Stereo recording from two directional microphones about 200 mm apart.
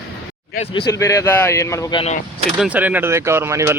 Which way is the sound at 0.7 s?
20° left (ahead or behind).